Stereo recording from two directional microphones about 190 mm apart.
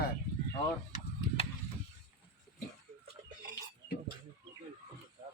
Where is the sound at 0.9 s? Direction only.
40° left (ahead or behind).